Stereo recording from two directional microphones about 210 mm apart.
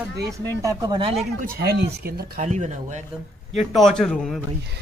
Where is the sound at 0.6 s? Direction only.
15° right (ahead or behind).